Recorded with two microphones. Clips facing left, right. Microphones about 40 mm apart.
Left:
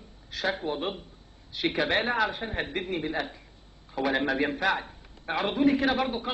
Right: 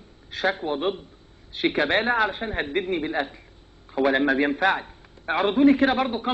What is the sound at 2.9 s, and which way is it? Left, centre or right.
Speech, right.